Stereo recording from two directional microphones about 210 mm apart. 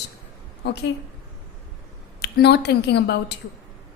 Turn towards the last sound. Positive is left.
turn(degrees=55)  # may be behind; listen again after turning